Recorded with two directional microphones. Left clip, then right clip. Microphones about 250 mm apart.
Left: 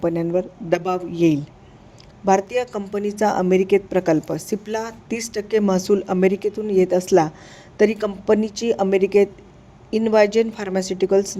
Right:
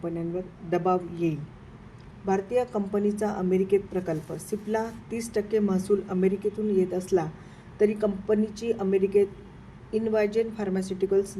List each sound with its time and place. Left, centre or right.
0.0 s a woman's voice: left